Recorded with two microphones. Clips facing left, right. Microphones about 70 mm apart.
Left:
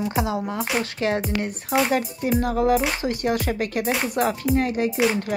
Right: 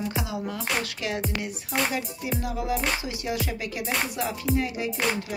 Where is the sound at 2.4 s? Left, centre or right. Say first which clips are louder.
Left 9 dB; left.